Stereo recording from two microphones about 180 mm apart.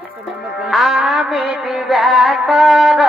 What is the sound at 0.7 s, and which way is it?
Music, centre (ahead or behind).